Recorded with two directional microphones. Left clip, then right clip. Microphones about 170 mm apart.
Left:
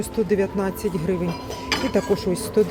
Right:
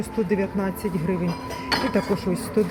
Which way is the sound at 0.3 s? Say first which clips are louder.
Left 3 dB; 10° left (ahead or behind).